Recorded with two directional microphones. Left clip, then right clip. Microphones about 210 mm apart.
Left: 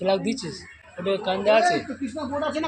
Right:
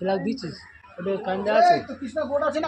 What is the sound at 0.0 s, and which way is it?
A man's voice, 30° right (ahead or behind).